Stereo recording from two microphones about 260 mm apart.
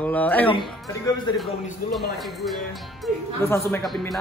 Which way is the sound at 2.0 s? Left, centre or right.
Centre.